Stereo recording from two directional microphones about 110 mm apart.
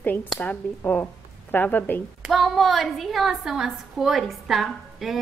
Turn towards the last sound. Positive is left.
turn(degrees=0)  # may be behind; listen again after turning